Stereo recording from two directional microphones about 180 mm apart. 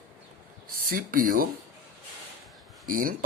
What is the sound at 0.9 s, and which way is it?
Speech, 50° right (ahead or behind).